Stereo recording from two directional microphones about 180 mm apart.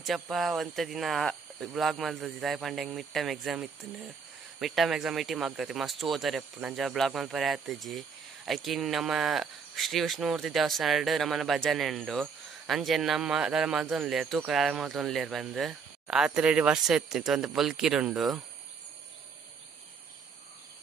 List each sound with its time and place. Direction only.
0.0 s speech: centre (ahead or behind)